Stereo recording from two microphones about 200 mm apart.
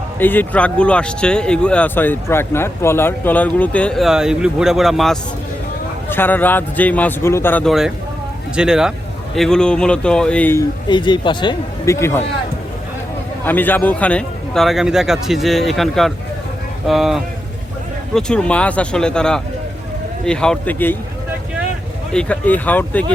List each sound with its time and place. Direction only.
0.2 s speech: 10° left (ahead or behind)
6.1 s speech: 10° left (ahead or behind)
10.8 s speech: 20° left (ahead or behind)
13.4 s speech: 10° left (ahead or behind)
22.1 s speech: 5° left (ahead or behind)